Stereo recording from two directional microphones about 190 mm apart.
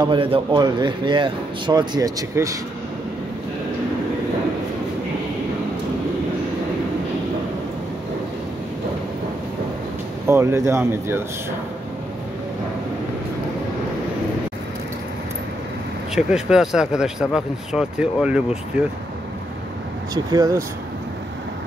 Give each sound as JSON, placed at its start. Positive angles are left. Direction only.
{"t": 0.0, "sound": "speech", "side_deg": -25}
{"t": 10.2, "sound": "speech", "side_deg": -15}
{"t": 16.2, "sound": "speech", "side_deg": -5}
{"t": 20.2, "sound": "speech", "side_deg": -20}